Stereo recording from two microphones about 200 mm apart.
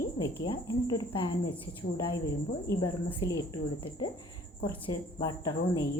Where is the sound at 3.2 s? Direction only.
20° left (ahead or behind).